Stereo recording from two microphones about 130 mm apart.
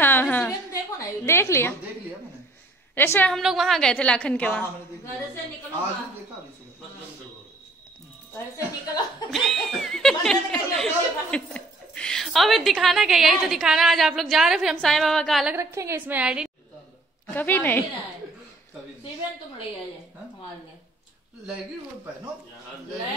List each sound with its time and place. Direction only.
0.0 s a sound: 15° left (ahead or behind)
0.5 s a sound: 25° left (ahead or behind)
2.9 s a woman's voice: 15° left (ahead or behind)
3.3 s a woman's voice: centre (ahead or behind)
8.5 s a woman's voice: 30° left (ahead or behind)
9.3 s speech: centre (ahead or behind)
15.5 s a woman's voice: 20° right (ahead or behind)
17.3 s a woman's voice: 15° left (ahead or behind)